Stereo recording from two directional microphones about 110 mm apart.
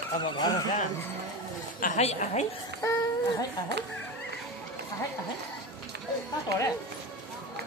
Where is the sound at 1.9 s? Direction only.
80° left.